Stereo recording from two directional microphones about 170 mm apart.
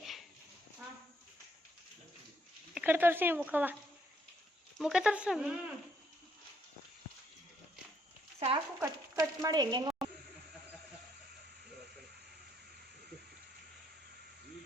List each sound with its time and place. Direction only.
0.0 s a sound: centre (ahead or behind)
2.7 s speech: 10° right (ahead or behind)
4.8 s speech: 5° right (ahead or behind)
8.4 s stir: 35° right (ahead or behind)
8.8 s speech: 20° right (ahead or behind)